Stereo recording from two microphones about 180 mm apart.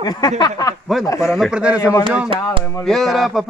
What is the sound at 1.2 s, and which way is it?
Speech, centre (ahead or behind).